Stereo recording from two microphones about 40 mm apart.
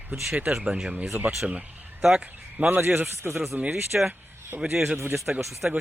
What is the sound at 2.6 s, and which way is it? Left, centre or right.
Speech, right.